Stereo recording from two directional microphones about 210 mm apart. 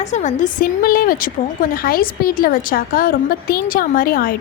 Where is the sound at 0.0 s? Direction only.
35° left (ahead or behind).